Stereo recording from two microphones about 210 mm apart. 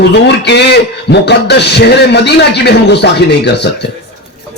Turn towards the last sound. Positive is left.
turn(degrees=55)  # may be behind; listen again after turning